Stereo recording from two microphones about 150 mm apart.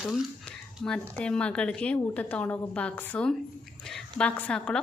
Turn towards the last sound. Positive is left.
turn(degrees=10)  # may be behind; listen again after turning